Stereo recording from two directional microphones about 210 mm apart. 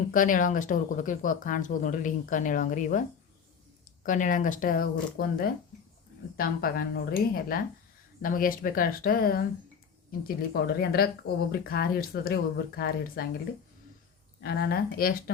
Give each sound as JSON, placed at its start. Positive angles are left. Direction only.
{"t": 0.1, "sound": "speech", "side_deg": 40}
{"t": 4.0, "sound": "speech", "side_deg": 40}
{"t": 14.4, "sound": "speech", "side_deg": 50}